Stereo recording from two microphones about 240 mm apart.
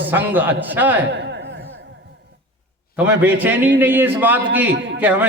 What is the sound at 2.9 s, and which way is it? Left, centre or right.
A man's voice, centre.